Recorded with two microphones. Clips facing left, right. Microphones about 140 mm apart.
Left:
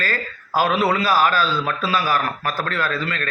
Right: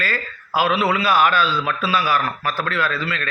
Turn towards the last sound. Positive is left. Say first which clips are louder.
# right 1 dB
turn(degrees=40)  # may be behind; listen again after turning